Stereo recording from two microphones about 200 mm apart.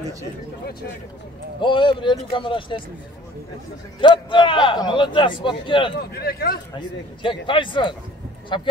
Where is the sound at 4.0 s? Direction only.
25° left (ahead or behind).